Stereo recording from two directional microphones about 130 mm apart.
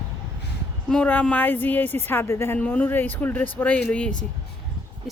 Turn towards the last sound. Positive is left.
turn(degrees=10)  # may be behind; listen again after turning